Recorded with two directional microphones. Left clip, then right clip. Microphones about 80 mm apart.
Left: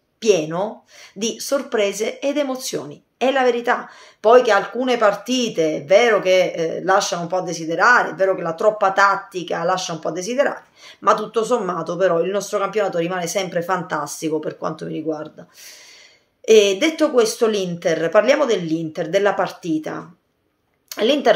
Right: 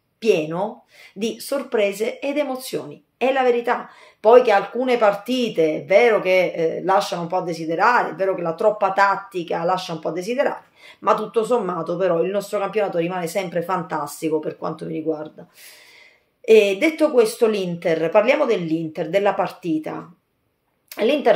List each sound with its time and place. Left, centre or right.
0.2 s speech: left
16.4 s speech: left